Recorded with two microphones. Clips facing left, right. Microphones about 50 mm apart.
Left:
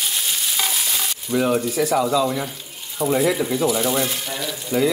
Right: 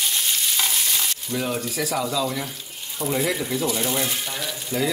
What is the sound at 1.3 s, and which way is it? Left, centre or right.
Speech, centre.